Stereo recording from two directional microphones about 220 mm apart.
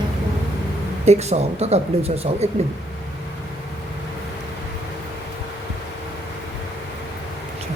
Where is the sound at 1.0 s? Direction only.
30° right (ahead or behind).